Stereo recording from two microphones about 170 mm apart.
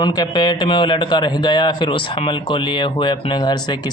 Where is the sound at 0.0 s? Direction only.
25° left (ahead or behind).